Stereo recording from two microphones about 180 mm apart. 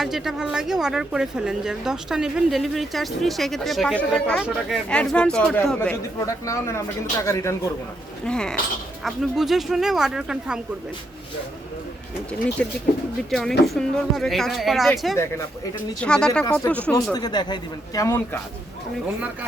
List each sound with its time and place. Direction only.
0.0 s speech: centre (ahead or behind)
6.1 s speech: 15° left (ahead or behind)
8.2 s speech: 5° left (ahead or behind)
12.6 s speech: 5° left (ahead or behind)
15.1 s speech: 15° left (ahead or behind)
17.1 s speech: 20° left (ahead or behind)